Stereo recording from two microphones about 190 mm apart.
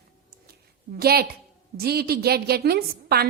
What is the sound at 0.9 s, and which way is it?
A woman's voice, 55° right (ahead or behind).